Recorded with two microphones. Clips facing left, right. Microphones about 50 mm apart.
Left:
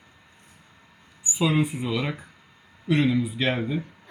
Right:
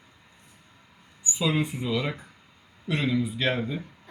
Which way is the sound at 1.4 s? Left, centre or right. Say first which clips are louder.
Left 3 dB; centre.